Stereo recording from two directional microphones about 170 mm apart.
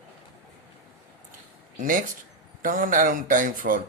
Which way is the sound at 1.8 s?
55° right (ahead or behind).